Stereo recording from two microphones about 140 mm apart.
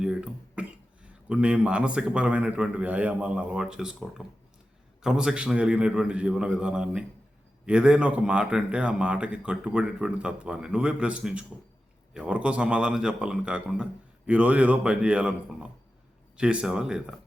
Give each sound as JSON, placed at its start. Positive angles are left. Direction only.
{"t": 0.0, "sound": "cough", "side_deg": -5}
{"t": 1.0, "sound": "speech", "side_deg": -10}